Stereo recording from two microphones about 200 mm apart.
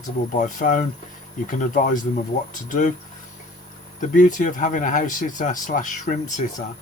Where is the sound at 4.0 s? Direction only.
40° left (ahead or behind).